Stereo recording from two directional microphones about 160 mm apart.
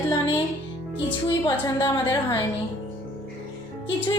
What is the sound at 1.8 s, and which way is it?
Speech, 15° left (ahead or behind).